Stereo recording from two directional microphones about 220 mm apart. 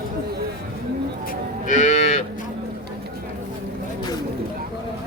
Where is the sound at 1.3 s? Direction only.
35° left (ahead or behind).